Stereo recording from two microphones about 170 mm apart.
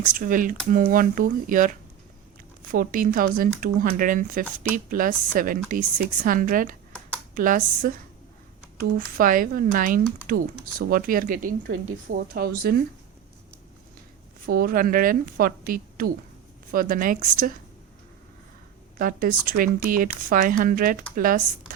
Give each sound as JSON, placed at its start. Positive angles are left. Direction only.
{"t": 0.0, "sound": "speech", "side_deg": -50}
{"t": 2.7, "sound": "speech", "side_deg": -55}
{"t": 14.4, "sound": "speech", "side_deg": -60}
{"t": 18.9, "sound": "speech", "side_deg": -55}